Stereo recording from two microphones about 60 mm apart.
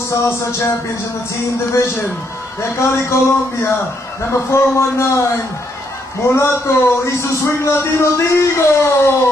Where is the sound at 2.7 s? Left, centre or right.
Left.